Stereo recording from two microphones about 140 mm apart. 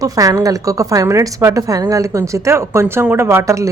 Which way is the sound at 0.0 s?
25° right (ahead or behind).